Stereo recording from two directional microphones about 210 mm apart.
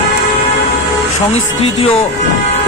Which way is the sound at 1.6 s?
25° left (ahead or behind).